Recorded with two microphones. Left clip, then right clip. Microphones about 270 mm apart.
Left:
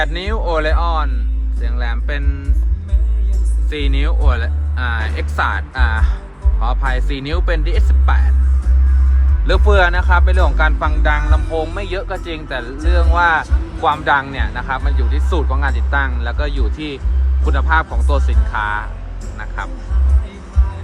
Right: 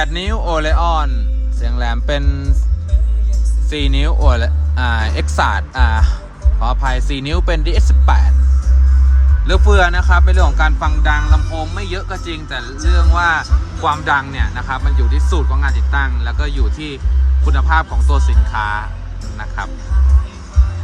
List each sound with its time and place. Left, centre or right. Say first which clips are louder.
0.0 s speech: even; centre
3.7 s speech: right 3 dB; centre
9.5 s music: even; centre
19.4 s speech: right 1 dB; centre